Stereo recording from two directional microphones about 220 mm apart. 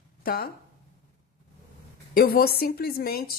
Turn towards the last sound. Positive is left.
turn(degrees=45)  # may be behind; listen again after turning